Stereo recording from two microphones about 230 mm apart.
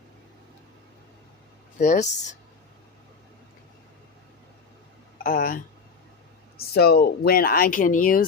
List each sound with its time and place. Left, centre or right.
1.8 s speech: left
5.1 s speech: left
6.6 s speech: left